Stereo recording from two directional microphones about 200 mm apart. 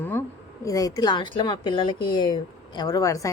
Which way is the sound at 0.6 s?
15° left (ahead or behind).